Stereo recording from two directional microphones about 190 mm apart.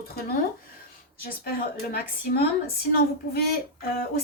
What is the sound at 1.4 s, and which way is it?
A woman's voice, 55° left (ahead or behind).